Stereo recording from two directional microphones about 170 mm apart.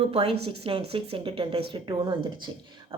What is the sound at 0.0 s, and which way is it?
A woman's voice, 35° right (ahead or behind).